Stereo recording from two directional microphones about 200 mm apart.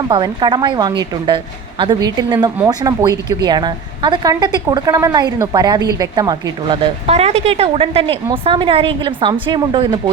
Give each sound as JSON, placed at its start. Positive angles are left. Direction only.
{"t": 0.1, "sound": "a woman's voice", "side_deg": -20}
{"t": 7.1, "sound": "a woman's voice", "side_deg": -30}